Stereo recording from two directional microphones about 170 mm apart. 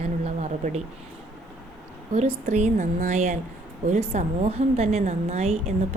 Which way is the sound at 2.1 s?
40° right (ahead or behind).